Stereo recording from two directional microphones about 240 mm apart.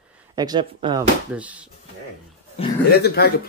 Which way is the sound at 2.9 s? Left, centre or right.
Left.